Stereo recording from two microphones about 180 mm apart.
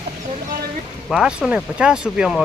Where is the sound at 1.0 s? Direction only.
Centre (ahead or behind).